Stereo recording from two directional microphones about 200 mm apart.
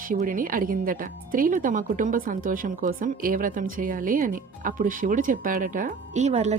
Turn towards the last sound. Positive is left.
turn(degrees=-35)  # may be behind; listen again after turning